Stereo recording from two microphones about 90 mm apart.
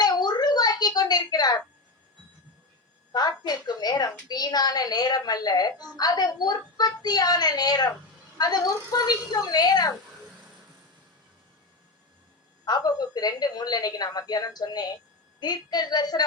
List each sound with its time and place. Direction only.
0.0 s a sound: 50° left (ahead or behind)
3.1 s a woman's voice: 50° left (ahead or behind)
12.6 s a woman's voice: 45° left (ahead or behind)